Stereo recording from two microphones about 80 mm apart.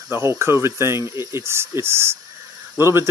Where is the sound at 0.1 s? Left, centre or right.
Right.